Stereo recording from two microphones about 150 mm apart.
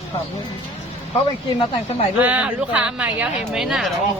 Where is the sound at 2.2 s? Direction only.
10° right (ahead or behind).